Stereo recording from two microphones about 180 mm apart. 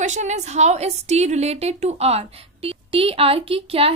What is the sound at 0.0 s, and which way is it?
Speech, 40° right (ahead or behind).